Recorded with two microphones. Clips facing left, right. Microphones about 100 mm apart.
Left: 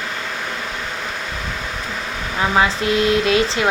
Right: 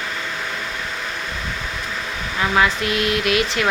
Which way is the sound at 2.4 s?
25° left (ahead or behind).